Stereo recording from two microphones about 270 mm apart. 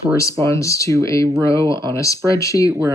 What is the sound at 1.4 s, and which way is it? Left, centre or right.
Speech, centre.